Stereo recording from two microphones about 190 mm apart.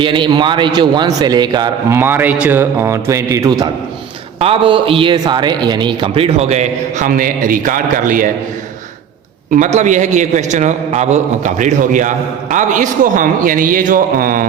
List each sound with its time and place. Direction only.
0.0 s a man's voice: 25° right (ahead or behind)
2.0 s a man's voice: 10° right (ahead or behind)
4.4 s a man's voice: 30° right (ahead or behind); by 8.3 s 45° right (ahead or behind)
9.5 s a man's voice: 40° right (ahead or behind)